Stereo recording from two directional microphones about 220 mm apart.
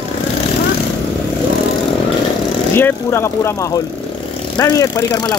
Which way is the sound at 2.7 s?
10° left (ahead or behind).